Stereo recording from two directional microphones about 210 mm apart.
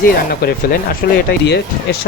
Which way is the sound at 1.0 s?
50° left (ahead or behind).